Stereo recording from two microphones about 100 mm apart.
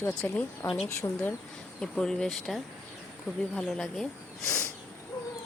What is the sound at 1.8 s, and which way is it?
Speech, 5° left (ahead or behind).